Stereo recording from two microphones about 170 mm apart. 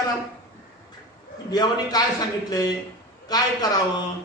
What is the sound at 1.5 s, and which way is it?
A man's voice, 25° left (ahead or behind).